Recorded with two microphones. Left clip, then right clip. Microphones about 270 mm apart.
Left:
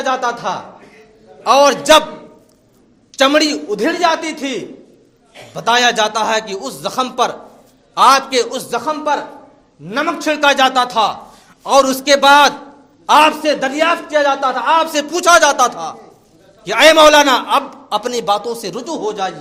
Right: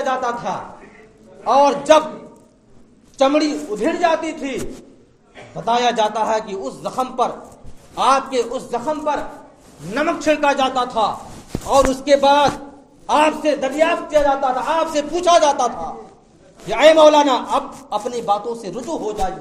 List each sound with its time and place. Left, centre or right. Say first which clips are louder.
0.0 s a sound: left 3 dB; left
1.5 s a man's voice: left 3 dB; left
3.2 s a man's voice: left 4 dB; left
5.5 s a man's voice: left 4 dB; left